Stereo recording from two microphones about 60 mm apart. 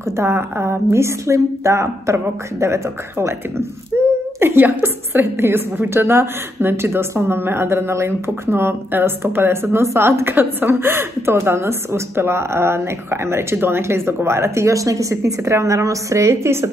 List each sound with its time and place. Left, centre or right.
0.0 s a woman's voice: right
3.9 s a sound: right
4.4 s a woman's voice: right